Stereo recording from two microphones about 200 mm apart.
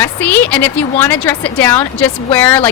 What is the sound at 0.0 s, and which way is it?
A woman's voice, 10° left (ahead or behind).